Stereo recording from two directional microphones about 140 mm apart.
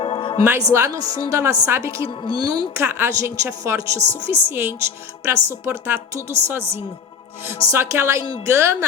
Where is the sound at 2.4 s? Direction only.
30° right (ahead or behind).